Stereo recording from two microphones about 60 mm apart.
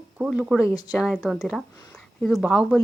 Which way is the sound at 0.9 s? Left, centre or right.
Centre.